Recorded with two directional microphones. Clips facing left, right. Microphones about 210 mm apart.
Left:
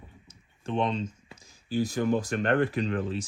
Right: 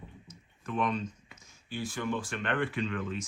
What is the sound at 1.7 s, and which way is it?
Speech, 40° left (ahead or behind).